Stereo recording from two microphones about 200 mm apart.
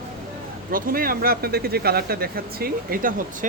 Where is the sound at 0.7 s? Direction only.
45° right (ahead or behind).